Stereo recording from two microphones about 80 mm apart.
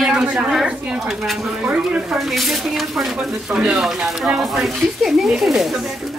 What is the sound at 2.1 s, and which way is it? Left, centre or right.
Speech, centre.